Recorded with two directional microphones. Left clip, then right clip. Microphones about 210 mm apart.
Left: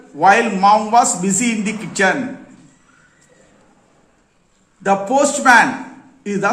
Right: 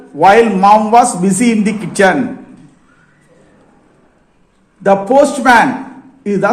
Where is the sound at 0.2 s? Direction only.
20° right (ahead or behind).